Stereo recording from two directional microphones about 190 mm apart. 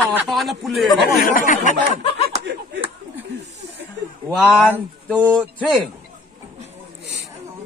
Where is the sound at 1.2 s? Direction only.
45° left (ahead or behind).